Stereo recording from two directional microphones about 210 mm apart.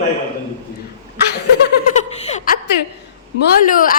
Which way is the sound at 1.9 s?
35° left (ahead or behind).